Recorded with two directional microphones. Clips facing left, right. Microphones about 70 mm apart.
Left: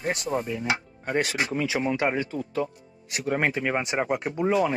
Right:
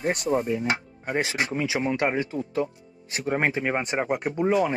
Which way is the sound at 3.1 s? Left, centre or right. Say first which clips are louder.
Even; right.